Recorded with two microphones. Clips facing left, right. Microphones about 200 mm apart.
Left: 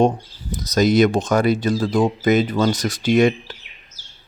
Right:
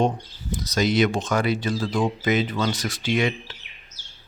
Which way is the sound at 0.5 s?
40° left (ahead or behind).